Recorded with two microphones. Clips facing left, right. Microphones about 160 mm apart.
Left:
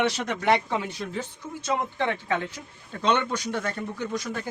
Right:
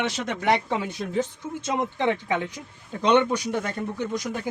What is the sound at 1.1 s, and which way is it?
Speech, 20° right (ahead or behind).